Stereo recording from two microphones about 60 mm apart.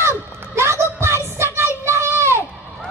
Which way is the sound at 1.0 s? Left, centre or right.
Right.